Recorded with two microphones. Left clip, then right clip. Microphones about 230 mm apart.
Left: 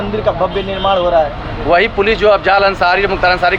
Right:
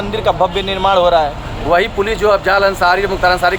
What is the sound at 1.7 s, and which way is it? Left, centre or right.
A man's voice, centre.